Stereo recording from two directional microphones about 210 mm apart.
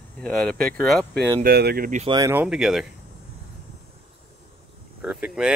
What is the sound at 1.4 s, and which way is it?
Speech, 50° right (ahead or behind).